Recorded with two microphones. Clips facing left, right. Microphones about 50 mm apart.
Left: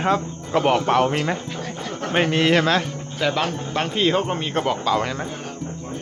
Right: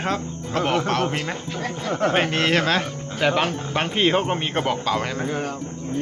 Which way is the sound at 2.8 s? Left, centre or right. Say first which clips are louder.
Right 1 dB; right.